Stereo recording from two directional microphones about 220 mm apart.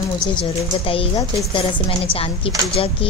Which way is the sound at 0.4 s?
25° left (ahead or behind).